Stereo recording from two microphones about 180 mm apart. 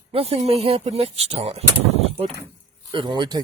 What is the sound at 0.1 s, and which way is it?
Speech, 35° right (ahead or behind).